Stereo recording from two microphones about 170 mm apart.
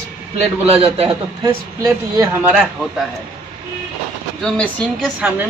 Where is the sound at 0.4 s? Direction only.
35° right (ahead or behind).